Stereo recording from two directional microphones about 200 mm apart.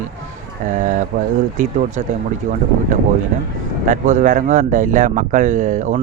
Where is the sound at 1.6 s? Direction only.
40° right (ahead or behind).